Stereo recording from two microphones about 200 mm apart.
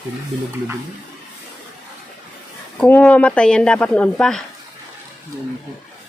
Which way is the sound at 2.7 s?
5° left (ahead or behind).